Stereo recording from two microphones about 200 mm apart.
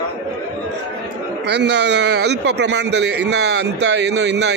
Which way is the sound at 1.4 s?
60° right (ahead or behind).